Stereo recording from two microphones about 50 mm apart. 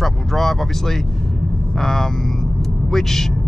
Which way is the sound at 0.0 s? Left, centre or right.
Centre.